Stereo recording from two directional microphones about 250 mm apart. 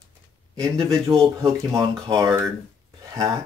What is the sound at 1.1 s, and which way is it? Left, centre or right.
Speech, right.